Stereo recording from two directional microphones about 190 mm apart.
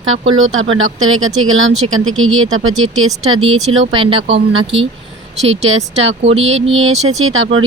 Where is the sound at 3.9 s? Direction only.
25° right (ahead or behind).